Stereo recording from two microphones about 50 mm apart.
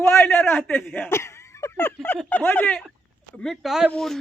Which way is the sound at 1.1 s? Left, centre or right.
Left.